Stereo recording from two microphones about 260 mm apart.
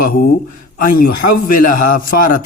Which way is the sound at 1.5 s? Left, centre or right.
Left.